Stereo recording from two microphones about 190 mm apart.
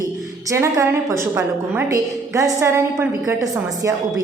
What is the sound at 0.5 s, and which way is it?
A woman's voice, 15° right (ahead or behind).